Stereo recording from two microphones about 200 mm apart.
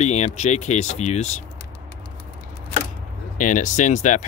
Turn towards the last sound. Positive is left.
turn(degrees=35)  # may be behind; listen again after turning